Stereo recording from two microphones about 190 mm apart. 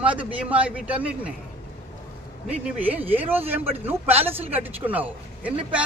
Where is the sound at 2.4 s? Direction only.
10° right (ahead or behind).